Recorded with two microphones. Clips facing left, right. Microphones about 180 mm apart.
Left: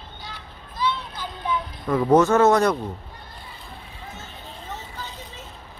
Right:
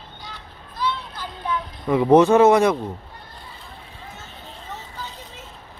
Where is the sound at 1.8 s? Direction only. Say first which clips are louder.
Right 3 dB; 15° right (ahead or behind).